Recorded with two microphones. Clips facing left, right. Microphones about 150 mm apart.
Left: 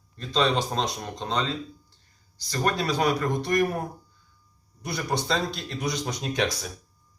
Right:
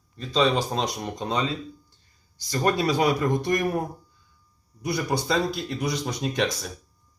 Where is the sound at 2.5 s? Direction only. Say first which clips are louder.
Right 3 dB; 15° right (ahead or behind).